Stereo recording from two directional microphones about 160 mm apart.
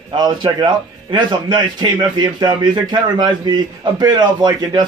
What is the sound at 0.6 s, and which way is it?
A man's voice, 25° right (ahead or behind).